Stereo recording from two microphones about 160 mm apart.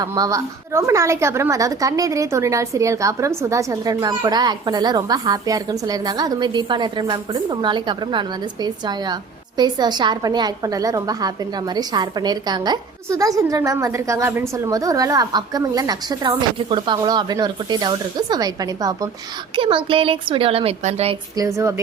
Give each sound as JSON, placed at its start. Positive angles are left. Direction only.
{"t": 0.0, "sound": "a woman's voice", "side_deg": -20}
{"t": 21.3, "sound": "a woman's voice", "side_deg": -20}